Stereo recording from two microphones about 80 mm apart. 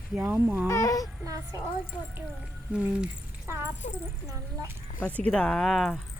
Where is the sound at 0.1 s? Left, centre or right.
Centre.